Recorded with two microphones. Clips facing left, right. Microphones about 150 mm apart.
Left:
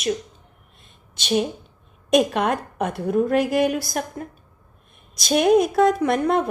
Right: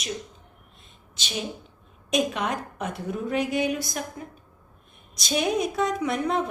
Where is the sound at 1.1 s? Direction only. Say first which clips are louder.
Left 11 dB; 60° left (ahead or behind).